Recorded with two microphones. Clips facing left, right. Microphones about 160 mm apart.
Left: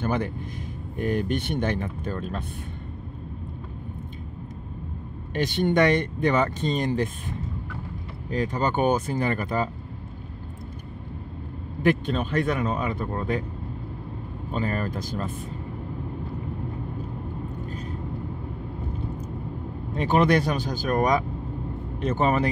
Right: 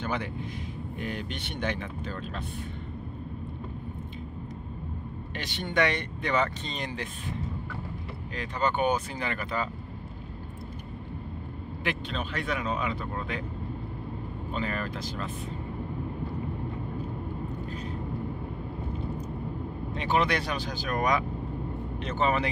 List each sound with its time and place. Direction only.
0.0 s speech: 45° left (ahead or behind)
5.3 s speech: 50° left (ahead or behind)
11.8 s speech: 45° left (ahead or behind)
14.5 s speech: 40° left (ahead or behind)
19.9 s speech: 45° left (ahead or behind)